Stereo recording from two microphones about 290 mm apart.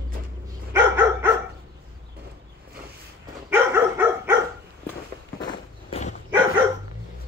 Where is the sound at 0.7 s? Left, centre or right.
Centre.